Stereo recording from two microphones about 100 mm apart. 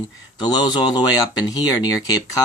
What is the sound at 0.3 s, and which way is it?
Speech, 45° left (ahead or behind).